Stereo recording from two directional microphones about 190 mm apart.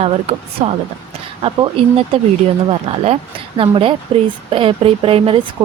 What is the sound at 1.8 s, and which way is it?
A woman's voice, 30° right (ahead or behind).